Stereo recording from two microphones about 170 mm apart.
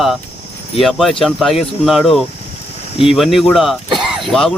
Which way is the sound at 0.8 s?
Centre (ahead or behind).